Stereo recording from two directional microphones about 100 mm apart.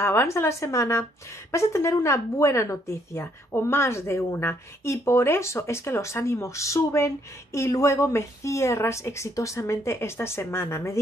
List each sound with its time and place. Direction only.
0.0 s speech: 25° left (ahead or behind)